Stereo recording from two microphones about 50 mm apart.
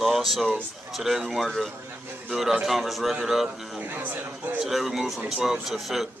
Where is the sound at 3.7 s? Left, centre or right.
Right.